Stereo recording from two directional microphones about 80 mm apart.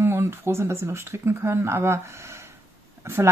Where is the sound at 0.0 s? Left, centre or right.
Right.